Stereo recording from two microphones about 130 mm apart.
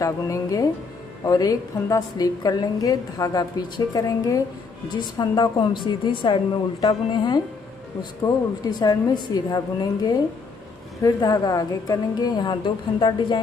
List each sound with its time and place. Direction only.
0.0 s a woman's voice: 25° left (ahead or behind)
8.6 s a woman's voice: 30° left (ahead or behind)